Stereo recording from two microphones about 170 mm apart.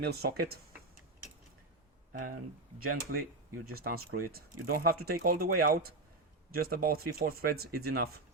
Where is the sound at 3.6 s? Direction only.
60° right (ahead or behind).